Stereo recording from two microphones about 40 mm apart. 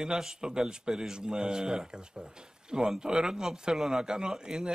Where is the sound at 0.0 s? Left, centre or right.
Centre.